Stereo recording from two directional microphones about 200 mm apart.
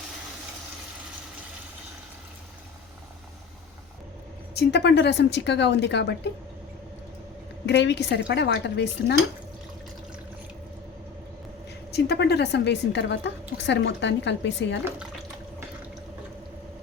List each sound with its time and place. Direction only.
4.5 s a woman's voice: 55° left (ahead or behind)
7.7 s a woman's voice: 60° left (ahead or behind)
11.9 s a woman's voice: 55° left (ahead or behind)